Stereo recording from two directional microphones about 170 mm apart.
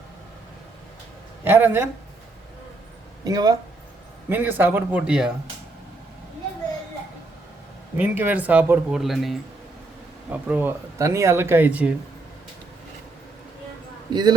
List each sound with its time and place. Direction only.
1.5 s speech: 10° right (ahead or behind)
3.2 s speech: 20° right (ahead or behind)
4.3 s speech: 10° right (ahead or behind)
7.9 s speech: 10° right (ahead or behind)
14.1 s speech: 25° right (ahead or behind)